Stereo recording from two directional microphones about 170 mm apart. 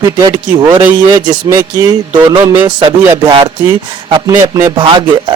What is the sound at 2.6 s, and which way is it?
Speech, 30° right (ahead or behind).